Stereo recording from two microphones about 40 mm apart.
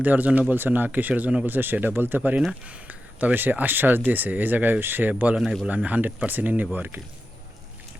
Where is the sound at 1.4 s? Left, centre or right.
Right.